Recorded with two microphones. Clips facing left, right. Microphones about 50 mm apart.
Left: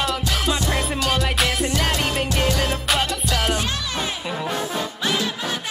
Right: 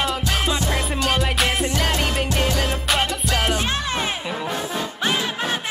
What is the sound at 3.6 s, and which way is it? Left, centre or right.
Music, right.